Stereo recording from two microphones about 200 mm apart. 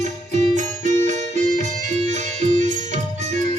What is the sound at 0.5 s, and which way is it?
Music, 35° right (ahead or behind).